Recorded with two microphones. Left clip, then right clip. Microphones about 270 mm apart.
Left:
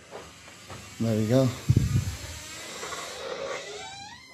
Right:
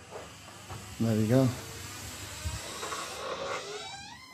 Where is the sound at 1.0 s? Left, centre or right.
Centre.